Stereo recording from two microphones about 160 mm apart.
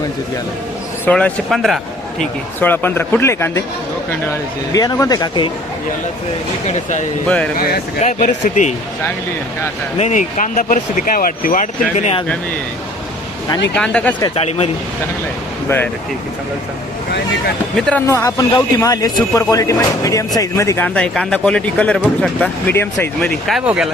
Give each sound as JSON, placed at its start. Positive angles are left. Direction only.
{"t": 1.0, "sound": "a man's voice", "side_deg": 5}
{"t": 2.6, "sound": "speech", "side_deg": 10}
{"t": 4.7, "sound": "speech", "side_deg": 20}
{"t": 7.3, "sound": "speech", "side_deg": 5}
{"t": 8.2, "sound": "speech", "side_deg": 50}
{"t": 10.0, "sound": "speech", "side_deg": 50}
{"t": 13.7, "sound": "speech", "side_deg": 5}
{"t": 14.3, "sound": "speech", "side_deg": 40}
{"t": 17.7, "sound": "speech", "side_deg": 5}
{"t": 18.0, "sound": "speech", "side_deg": 20}
{"t": 23.5, "sound": "speech", "side_deg": -5}